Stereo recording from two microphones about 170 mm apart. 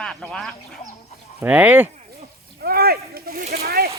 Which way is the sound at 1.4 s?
10° right (ahead or behind).